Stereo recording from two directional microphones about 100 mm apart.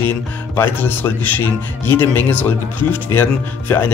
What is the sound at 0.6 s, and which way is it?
A man's voice, 20° left (ahead or behind).